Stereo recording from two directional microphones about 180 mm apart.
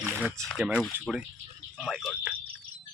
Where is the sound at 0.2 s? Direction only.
10° right (ahead or behind).